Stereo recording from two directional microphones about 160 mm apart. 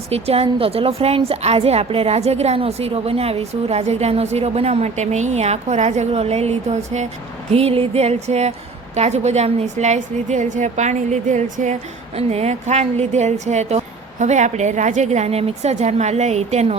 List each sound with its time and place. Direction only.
0.1 s a woman's voice: 40° right (ahead or behind)